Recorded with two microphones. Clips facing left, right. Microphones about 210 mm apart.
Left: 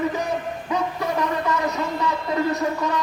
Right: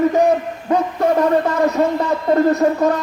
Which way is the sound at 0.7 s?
50° right (ahead or behind).